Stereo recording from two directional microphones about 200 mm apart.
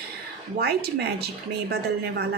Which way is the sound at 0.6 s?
55° right (ahead or behind).